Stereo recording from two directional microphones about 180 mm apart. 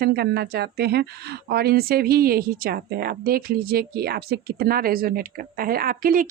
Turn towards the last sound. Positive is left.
turn(degrees=-55)  # may be behind; listen again after turning